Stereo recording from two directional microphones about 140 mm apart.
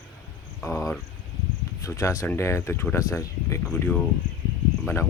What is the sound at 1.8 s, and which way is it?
Speech, 25° left (ahead or behind).